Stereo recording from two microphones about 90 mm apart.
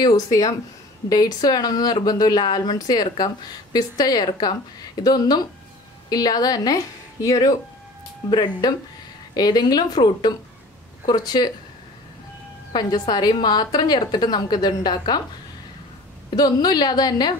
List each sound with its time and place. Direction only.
0.0 s a woman's voice: 45° left (ahead or behind)
9.3 s a woman's voice: 50° left (ahead or behind)
12.7 s a woman's voice: 50° left (ahead or behind)
16.3 s a woman's voice: 50° left (ahead or behind)